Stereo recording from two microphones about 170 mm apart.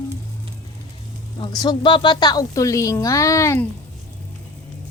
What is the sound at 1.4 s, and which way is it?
A woman's voice, 25° left (ahead or behind).